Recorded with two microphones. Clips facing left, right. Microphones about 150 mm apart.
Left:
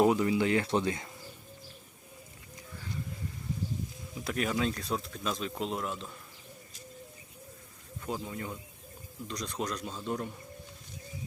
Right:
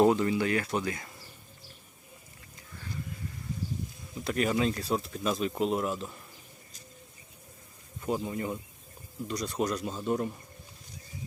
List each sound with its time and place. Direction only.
0.0 s speech: 10° left (ahead or behind)
4.2 s speech: centre (ahead or behind)
8.0 s speech: 5° right (ahead or behind)